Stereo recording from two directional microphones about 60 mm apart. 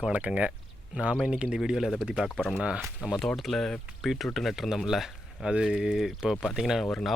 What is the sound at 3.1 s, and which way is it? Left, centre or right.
Speech, centre.